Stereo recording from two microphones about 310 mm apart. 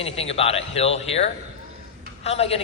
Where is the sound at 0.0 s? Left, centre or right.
Centre.